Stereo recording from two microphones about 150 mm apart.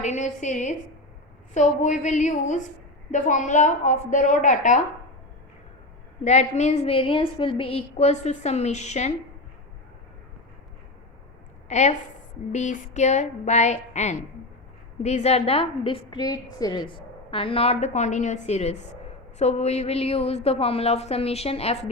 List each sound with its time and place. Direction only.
0.0 s a woman's voice: 50° left (ahead or behind)
6.2 s a woman's voice: 50° left (ahead or behind)
11.7 s a woman's voice: 50° left (ahead or behind)